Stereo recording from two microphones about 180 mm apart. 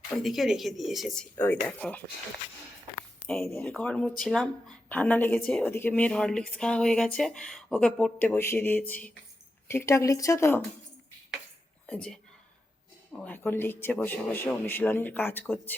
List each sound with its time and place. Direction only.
0.2 s speech: centre (ahead or behind)
3.6 s speech: 5° left (ahead or behind)
11.9 s speech: 5° left (ahead or behind)
13.2 s speech: 10° left (ahead or behind)